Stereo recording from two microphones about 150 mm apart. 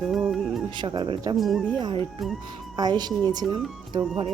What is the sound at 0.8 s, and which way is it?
Speech, 30° right (ahead or behind).